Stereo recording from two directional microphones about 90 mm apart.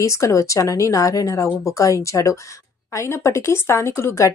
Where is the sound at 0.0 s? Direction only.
35° left (ahead or behind).